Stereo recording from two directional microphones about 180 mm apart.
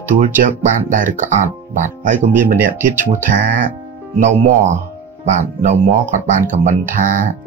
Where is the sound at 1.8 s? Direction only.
45° right (ahead or behind).